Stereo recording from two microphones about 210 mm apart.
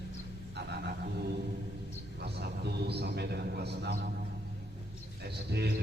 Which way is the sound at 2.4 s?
50° right (ahead or behind).